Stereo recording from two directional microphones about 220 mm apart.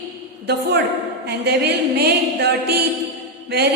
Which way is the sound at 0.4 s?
50° right (ahead or behind).